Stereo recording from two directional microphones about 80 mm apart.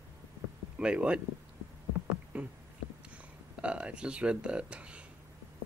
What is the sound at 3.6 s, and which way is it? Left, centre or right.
Speech, centre.